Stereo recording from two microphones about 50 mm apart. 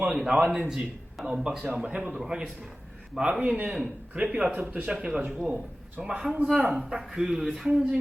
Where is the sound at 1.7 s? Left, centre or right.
Right.